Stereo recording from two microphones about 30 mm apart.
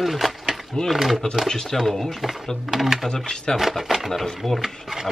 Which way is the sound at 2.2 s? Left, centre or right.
Centre.